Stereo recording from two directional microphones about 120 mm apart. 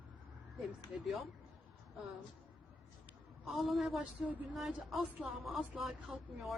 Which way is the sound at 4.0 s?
10° right (ahead or behind).